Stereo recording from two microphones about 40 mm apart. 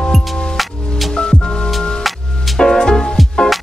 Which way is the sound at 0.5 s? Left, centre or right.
Centre.